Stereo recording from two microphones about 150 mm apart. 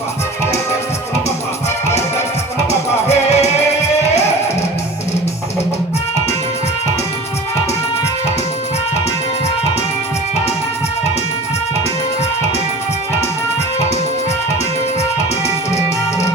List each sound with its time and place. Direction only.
3.1 s music: 45° left (ahead or behind)